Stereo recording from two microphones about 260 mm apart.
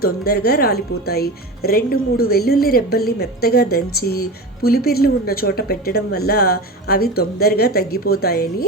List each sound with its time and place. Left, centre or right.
0.0 s speech: left